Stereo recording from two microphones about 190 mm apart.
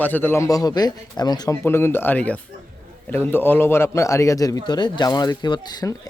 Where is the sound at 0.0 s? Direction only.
10° left (ahead or behind).